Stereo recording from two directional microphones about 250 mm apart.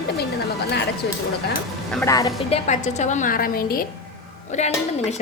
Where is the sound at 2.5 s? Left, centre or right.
Left.